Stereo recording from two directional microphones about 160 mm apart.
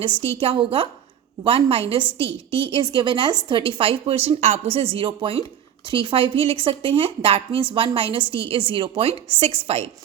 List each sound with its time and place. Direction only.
0.3 s a woman's voice: 35° right (ahead or behind)